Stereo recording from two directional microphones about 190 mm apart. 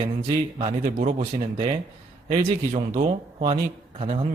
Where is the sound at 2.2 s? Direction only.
30° right (ahead or behind).